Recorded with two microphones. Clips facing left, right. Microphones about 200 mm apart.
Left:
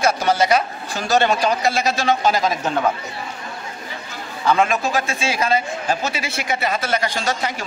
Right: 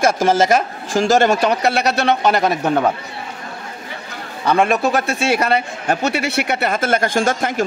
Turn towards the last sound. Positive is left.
turn(degrees=-50)  # may be behind; listen again after turning